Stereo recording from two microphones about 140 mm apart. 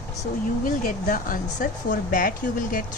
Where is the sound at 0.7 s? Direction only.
75° left (ahead or behind).